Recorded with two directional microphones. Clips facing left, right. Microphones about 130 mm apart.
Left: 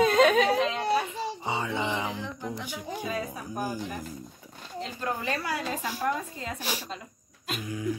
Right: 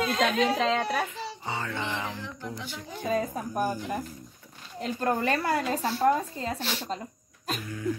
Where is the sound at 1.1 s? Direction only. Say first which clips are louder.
Left 3 dB; 15° left (ahead or behind).